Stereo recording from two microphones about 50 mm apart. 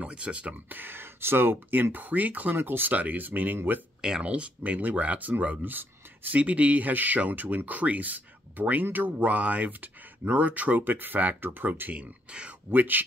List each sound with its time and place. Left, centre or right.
0.0 s speech: right
0.7 s speech: right
2.5 s speech: right
4.0 s speech: right
5.7 s speech: right
11.9 s speech: right
12.7 s speech: right